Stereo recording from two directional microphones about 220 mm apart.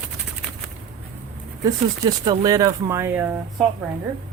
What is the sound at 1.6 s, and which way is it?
Speech, 15° right (ahead or behind).